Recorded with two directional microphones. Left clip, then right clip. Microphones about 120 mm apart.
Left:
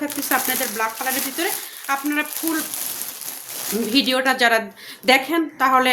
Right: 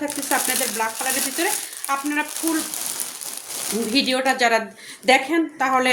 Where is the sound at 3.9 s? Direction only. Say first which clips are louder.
Left 2 dB; 40° left (ahead or behind).